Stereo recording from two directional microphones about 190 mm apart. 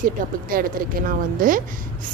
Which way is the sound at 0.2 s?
45° right (ahead or behind).